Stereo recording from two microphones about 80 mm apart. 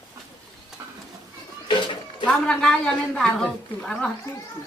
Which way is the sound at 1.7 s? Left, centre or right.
Left.